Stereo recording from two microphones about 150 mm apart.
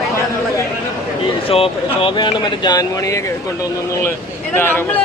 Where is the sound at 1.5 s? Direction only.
40° left (ahead or behind).